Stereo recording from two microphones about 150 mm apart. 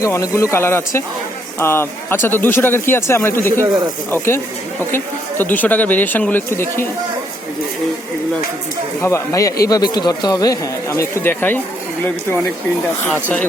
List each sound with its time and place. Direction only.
0.0 s speech: 20° left (ahead or behind)
4.9 s speech: 15° left (ahead or behind)
9.0 s speech: 15° left (ahead or behind)